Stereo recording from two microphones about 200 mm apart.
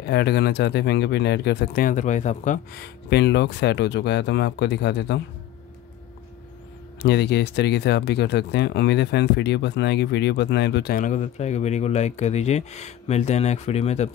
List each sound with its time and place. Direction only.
0.0 s speech: 55° left (ahead or behind); by 2.8 s 40° left (ahead or behind)
2.8 s speech: 55° left (ahead or behind)
7.0 s speech: 55° left (ahead or behind); by 14.1 s 35° left (ahead or behind)